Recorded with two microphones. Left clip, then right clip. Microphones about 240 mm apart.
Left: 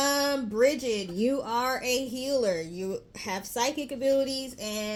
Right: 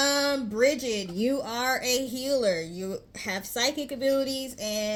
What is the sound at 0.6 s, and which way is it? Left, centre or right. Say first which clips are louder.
Speech: even; right.